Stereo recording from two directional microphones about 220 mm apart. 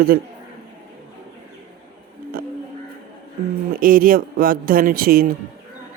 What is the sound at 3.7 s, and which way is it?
Speech, 40° right (ahead or behind).